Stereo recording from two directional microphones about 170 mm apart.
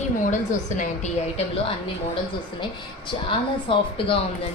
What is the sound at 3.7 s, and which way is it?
Speech, 30° left (ahead or behind).